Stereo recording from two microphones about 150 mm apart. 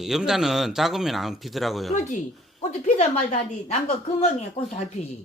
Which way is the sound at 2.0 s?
55° left (ahead or behind).